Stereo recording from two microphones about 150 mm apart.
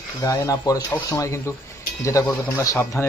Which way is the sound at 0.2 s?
25° left (ahead or behind).